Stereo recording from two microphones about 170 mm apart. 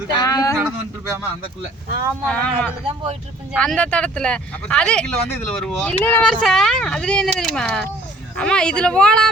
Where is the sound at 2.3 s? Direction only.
5° left (ahead or behind).